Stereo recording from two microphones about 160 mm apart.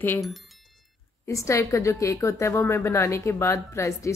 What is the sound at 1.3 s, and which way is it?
A woman's voice, 20° left (ahead or behind).